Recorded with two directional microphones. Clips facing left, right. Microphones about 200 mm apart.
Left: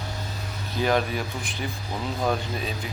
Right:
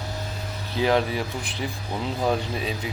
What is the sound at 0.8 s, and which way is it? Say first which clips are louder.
Speech: right 2 dB; 20° right (ahead or behind).